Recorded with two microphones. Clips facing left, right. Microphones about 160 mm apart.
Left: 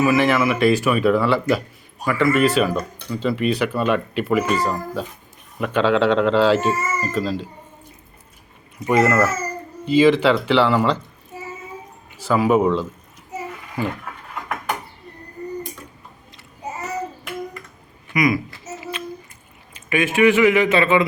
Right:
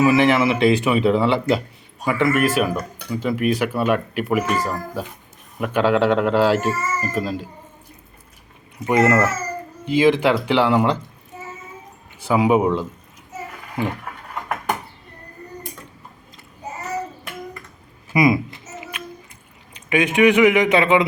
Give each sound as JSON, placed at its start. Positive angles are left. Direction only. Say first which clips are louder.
{"t": 0.0, "sound": "speech", "louder": "right 2 dB", "side_deg": -20}
{"t": 8.9, "sound": "speech", "louder": "even", "side_deg": -20}
{"t": 12.3, "sound": "speech", "louder": "even", "side_deg": -15}
{"t": 18.1, "sound": "a sound", "louder": "right 3 dB", "side_deg": -25}
{"t": 19.9, "sound": "speech", "louder": "right 1 dB", "side_deg": -20}